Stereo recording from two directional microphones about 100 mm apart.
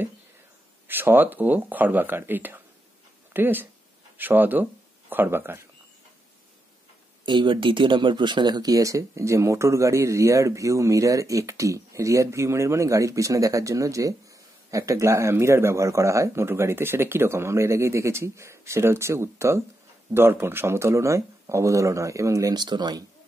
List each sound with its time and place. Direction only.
0.8 s speech: 20° right (ahead or behind)
7.2 s speech: 50° right (ahead or behind)